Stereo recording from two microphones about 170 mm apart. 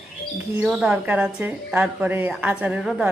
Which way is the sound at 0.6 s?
5° right (ahead or behind).